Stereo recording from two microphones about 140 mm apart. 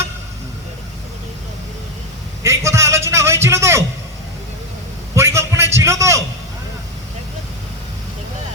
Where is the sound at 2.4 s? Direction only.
20° right (ahead or behind).